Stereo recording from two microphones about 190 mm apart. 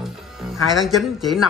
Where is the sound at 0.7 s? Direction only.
Centre (ahead or behind).